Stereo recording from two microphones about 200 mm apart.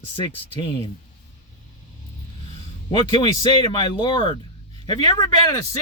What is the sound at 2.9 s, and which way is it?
Speech, 25° left (ahead or behind).